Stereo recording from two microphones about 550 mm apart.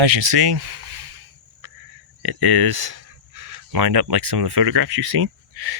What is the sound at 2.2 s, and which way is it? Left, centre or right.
Speech, right.